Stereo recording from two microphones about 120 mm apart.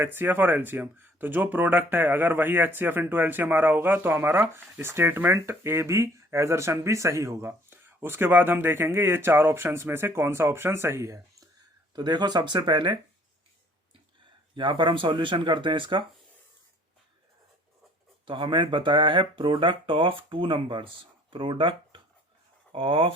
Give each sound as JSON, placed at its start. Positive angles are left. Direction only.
{"t": 0.0, "sound": "speech", "side_deg": -15}
{"t": 11.9, "sound": "speech", "side_deg": -35}
{"t": 14.5, "sound": "speech", "side_deg": -40}
{"t": 18.3, "sound": "speech", "side_deg": -45}